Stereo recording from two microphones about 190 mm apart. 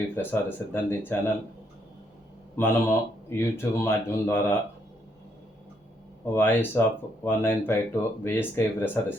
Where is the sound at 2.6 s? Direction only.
10° left (ahead or behind).